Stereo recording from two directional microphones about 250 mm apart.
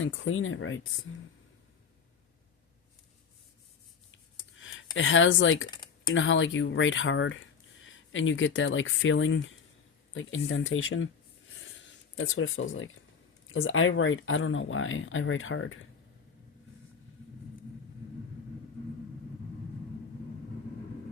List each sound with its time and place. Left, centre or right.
0.0 s speech: left
4.5 s a sound: left
4.9 s speech: left
5.7 s typing: centre
6.1 s speech: left
12.1 s speech: left